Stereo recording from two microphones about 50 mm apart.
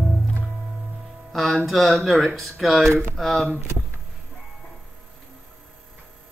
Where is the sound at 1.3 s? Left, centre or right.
Centre.